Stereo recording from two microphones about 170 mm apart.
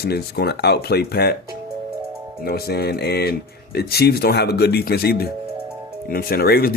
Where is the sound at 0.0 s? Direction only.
70° left (ahead or behind).